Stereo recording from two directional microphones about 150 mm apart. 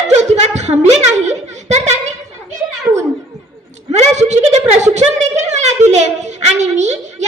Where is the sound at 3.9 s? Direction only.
50° right (ahead or behind).